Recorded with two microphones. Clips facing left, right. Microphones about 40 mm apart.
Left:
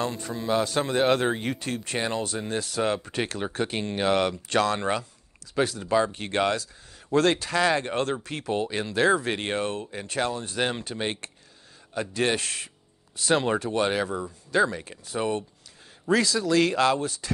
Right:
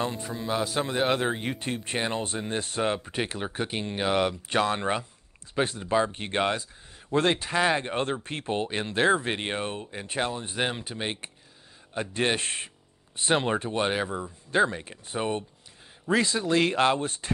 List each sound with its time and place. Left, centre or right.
0.0 s speech: centre
0.3 s speech: centre
1.6 s speech: right
3.0 s speech: centre
5.5 s speech: right
10.9 s speech: centre
11.9 s speech: right
14.5 s speech: right